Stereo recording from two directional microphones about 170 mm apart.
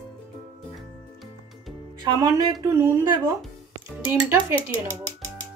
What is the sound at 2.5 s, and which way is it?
Speech, 15° right (ahead or behind).